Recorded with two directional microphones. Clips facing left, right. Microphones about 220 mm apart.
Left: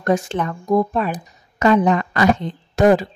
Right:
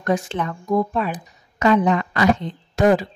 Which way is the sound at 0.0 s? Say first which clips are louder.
Left 3 dB; 45° left (ahead or behind).